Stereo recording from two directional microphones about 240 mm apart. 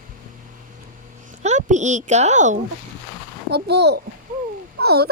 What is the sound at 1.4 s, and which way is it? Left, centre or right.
Speech, right.